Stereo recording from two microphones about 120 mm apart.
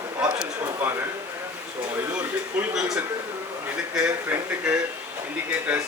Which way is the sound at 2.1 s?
10° right (ahead or behind).